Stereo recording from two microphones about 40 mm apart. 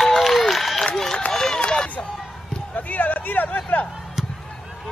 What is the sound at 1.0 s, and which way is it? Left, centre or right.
Run, centre.